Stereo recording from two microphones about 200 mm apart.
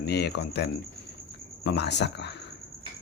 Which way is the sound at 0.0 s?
55° left (ahead or behind).